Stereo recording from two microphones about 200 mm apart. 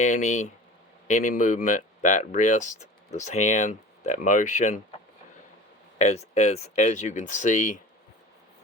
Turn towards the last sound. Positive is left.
turn(degrees=35)  # may be behind; listen again after turning